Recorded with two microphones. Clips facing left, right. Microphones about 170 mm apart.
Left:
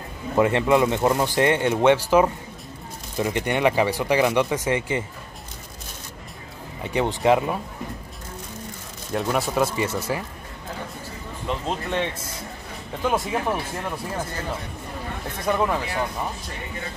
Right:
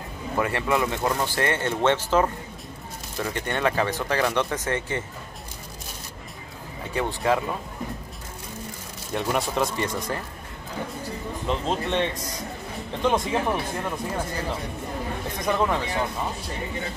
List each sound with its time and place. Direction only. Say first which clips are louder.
0.4 s speech: left 6 dB; 20° left (ahead or behind)
6.9 s speech: left 4 dB; 20° left (ahead or behind)
9.1 s speech: left 2 dB; centre (ahead or behind)
11.4 s speech: right 1 dB; centre (ahead or behind)
13.0 s speech: right 1 dB; 5° left (ahead or behind)
15.4 s speech: left 1 dB; 5° left (ahead or behind)